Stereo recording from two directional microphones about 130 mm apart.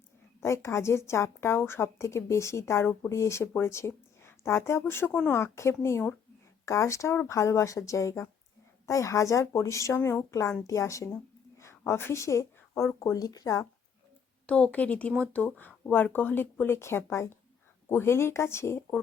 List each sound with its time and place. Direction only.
0.4 s a woman's voice: 20° left (ahead or behind)
14.4 s a woman's voice: 10° left (ahead or behind)